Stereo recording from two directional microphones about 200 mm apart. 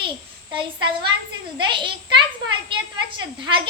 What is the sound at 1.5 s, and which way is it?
A woman's voice, 25° right (ahead or behind).